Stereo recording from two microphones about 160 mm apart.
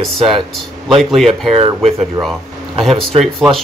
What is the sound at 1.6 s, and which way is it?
Speech, 40° right (ahead or behind).